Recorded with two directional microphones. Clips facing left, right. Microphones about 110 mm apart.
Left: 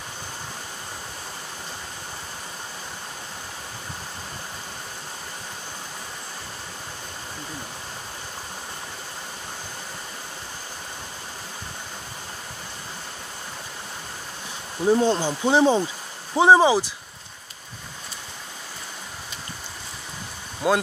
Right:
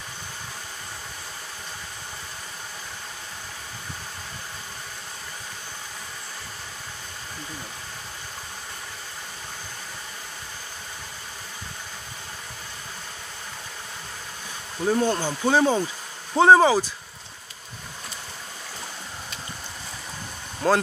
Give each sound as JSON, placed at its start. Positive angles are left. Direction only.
{"t": 14.9, "sound": "speech", "side_deg": 15}
{"t": 20.6, "sound": "speech", "side_deg": 10}